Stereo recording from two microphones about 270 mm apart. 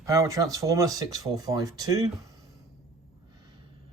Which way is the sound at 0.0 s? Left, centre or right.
Centre.